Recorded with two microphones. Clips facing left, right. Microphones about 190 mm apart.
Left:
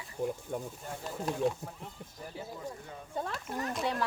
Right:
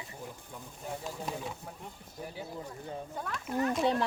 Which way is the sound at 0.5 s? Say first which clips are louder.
Left 10 dB; 55° left (ahead or behind).